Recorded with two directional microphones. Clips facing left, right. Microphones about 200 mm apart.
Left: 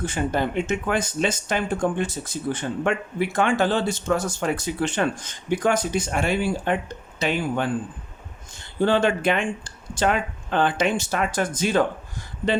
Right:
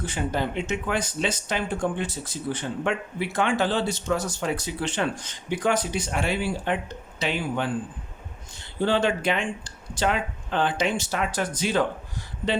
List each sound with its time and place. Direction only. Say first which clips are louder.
0.0 s speech: left 3 dB; 50° left (ahead or behind)